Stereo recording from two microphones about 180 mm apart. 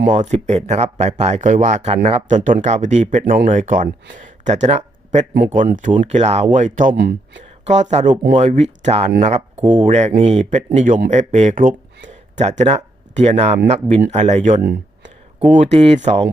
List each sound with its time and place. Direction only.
0.1 s speech: 40° right (ahead or behind)
6.9 s speech: 65° right (ahead or behind)
7.7 s speech: 40° right (ahead or behind)
14.6 s a sound: 60° right (ahead or behind)
15.4 s speech: 35° right (ahead or behind)